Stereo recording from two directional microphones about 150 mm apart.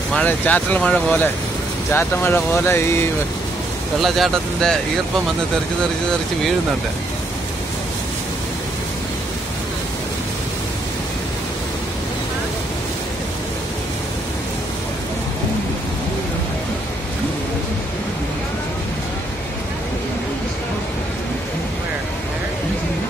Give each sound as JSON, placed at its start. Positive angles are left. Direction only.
{"t": 0.1, "sound": "speech", "side_deg": 10}
{"t": 4.0, "sound": "speech", "side_deg": 0}